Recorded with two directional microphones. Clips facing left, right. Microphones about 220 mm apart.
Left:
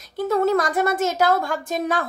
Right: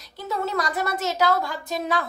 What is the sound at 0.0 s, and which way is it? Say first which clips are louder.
A woman's voice: left 9 dB; 50° left (ahead or behind).